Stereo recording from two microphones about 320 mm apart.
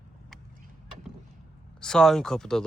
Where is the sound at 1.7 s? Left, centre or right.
Centre.